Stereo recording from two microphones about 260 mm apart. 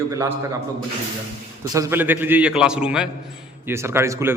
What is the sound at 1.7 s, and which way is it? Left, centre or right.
A man's voice, centre.